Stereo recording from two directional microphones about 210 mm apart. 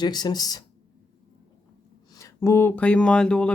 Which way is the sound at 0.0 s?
20° left (ahead or behind).